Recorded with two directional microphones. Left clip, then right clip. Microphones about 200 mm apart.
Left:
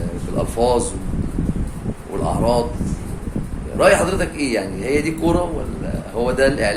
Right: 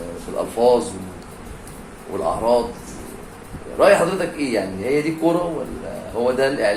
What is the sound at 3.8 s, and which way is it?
A man's voice, 10° left (ahead or behind).